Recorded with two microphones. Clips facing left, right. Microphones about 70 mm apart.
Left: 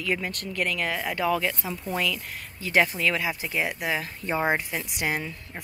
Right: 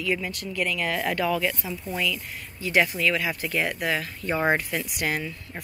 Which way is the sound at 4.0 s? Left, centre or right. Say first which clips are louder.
Right 1 dB; left.